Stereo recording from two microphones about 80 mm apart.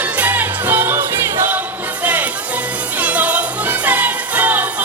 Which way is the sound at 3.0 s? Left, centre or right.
Centre.